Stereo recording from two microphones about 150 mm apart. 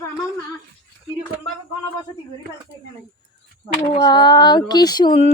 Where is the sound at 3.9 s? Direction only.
30° left (ahead or behind).